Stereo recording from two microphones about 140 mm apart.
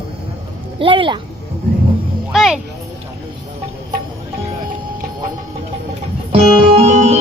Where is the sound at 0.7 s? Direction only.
40° right (ahead or behind).